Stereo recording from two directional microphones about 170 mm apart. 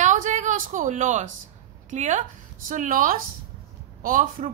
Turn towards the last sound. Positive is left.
turn(degrees=-50)  # may be behind; listen again after turning